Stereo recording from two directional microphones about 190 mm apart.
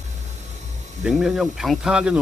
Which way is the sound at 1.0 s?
5° right (ahead or behind).